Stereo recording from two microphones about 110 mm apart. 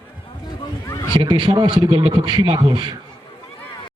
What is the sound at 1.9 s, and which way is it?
A man's voice, 55° right (ahead or behind).